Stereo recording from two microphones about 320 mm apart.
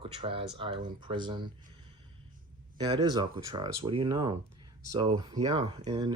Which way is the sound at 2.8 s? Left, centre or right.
Centre.